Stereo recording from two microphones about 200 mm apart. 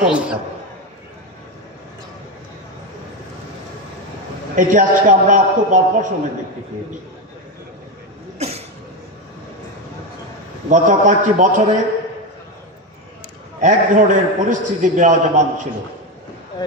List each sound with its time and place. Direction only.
0.0 s a man's voice: 5° right (ahead or behind)
4.6 s a man's voice: 40° right (ahead or behind)
8.4 s a sound: 30° right (ahead or behind)
10.7 s a man's voice: 40° right (ahead or behind)
13.6 s a man's voice: 40° right (ahead or behind)